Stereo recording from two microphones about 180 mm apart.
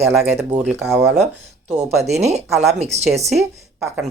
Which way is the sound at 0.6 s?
10° right (ahead or behind).